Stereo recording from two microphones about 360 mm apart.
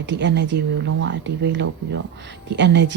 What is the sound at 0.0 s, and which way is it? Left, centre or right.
A woman's voice, right.